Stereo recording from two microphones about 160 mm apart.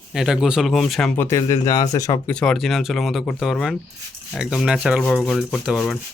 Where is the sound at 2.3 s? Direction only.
5° left (ahead or behind).